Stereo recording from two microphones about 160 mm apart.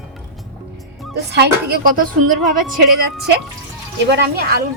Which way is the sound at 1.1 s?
90° right.